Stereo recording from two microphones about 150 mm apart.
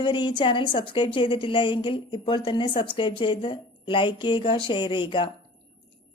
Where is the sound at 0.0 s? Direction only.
30° left (ahead or behind).